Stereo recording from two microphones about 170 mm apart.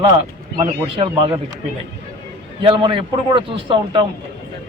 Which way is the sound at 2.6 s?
30° right (ahead or behind).